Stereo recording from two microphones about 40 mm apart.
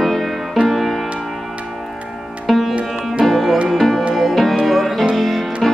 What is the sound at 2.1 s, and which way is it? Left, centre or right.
Sitar, centre.